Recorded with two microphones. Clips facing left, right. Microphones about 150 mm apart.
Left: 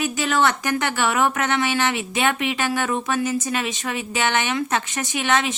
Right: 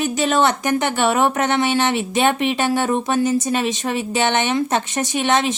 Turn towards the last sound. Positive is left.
turn(degrees=-25)  # may be behind; listen again after turning